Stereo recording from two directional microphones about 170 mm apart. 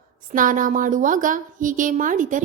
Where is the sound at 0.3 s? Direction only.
50° right (ahead or behind).